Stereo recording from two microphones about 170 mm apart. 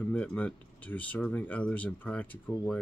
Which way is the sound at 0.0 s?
10° left (ahead or behind).